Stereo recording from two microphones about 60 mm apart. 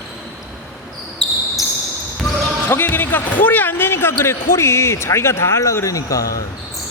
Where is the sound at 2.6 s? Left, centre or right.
Left.